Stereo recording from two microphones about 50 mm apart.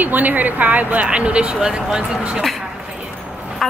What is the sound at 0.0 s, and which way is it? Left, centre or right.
Speech, right.